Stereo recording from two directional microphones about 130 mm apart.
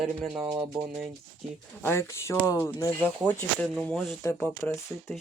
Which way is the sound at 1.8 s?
20° left (ahead or behind).